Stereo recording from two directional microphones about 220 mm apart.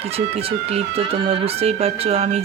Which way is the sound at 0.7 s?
25° right (ahead or behind).